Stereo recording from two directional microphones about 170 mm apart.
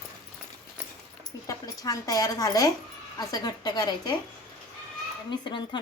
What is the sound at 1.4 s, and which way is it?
A woman's voice, 20° left (ahead or behind).